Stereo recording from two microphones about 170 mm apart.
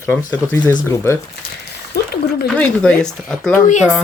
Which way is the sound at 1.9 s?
70° left (ahead or behind).